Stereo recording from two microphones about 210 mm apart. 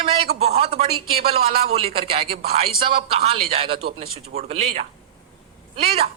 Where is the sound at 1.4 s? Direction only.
30° right (ahead or behind).